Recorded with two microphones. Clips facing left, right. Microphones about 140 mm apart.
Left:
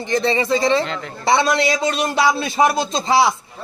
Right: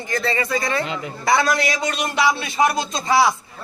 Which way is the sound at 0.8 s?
5° right (ahead or behind).